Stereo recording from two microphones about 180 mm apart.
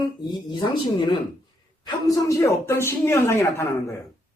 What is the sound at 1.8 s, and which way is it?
Speech, 20° left (ahead or behind).